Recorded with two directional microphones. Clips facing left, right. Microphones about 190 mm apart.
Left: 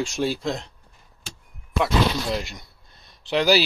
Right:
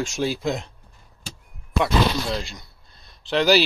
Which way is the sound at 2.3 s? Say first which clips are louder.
Left 1 dB; 20° left (ahead or behind).